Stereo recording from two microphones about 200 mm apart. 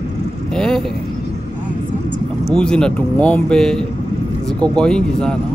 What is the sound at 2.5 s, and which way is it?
Speech, 5° left (ahead or behind).